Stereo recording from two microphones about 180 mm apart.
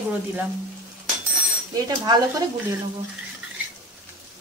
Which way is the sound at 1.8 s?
20° right (ahead or behind).